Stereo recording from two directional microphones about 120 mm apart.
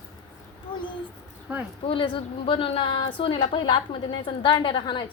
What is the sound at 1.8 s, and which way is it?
A woman's voice, 45° left (ahead or behind).